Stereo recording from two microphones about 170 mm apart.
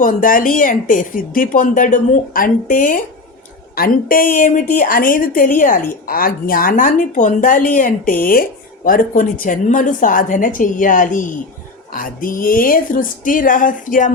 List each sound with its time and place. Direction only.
0.0 s a woman's voice: 55° left (ahead or behind)